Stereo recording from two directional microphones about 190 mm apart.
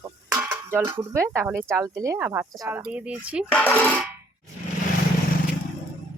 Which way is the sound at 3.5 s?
10° left (ahead or behind).